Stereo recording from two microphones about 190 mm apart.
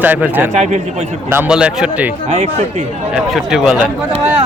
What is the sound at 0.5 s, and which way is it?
Speech, 40° right (ahead or behind).